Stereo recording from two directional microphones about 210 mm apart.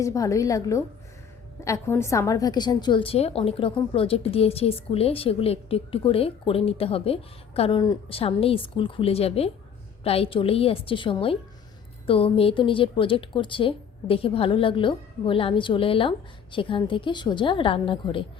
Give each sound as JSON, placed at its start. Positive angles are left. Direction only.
{"t": 0.0, "sound": "a woman's voice", "side_deg": 15}